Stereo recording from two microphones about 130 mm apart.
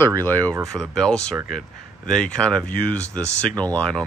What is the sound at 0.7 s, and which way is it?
Speech, 5° left (ahead or behind).